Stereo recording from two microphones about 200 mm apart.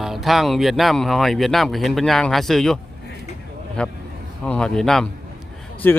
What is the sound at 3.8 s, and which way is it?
Speech, 5° left (ahead or behind).